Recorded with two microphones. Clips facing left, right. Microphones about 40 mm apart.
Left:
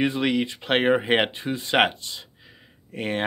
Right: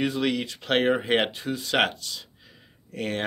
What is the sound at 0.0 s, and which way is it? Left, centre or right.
Speech, left.